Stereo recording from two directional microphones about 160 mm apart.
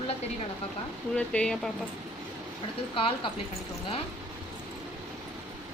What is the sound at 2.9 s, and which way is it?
Speech, 35° left (ahead or behind).